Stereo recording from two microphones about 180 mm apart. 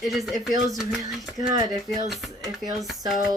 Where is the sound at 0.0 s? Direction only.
Centre (ahead or behind).